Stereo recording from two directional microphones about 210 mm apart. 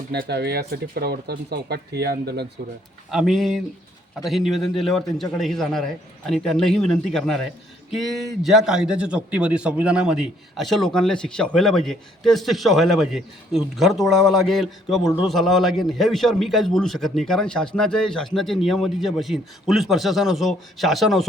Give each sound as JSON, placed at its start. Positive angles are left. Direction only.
{"t": 0.1, "sound": "speech", "side_deg": -50}
{"t": 3.1, "sound": "a man's voice", "side_deg": 0}